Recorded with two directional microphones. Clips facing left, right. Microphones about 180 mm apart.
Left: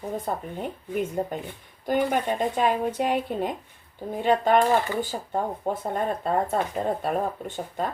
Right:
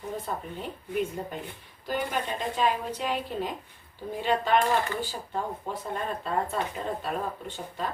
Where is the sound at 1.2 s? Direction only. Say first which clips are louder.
Left 7 dB; 45° left (ahead or behind).